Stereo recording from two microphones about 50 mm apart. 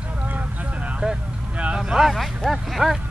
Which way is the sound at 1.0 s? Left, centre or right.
Right.